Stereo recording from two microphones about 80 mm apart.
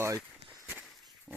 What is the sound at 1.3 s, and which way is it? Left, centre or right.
Dog, centre.